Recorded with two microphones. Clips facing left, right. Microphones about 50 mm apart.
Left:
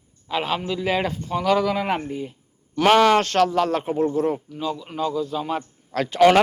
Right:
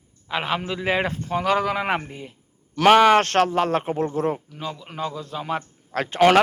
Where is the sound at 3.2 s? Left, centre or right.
Right.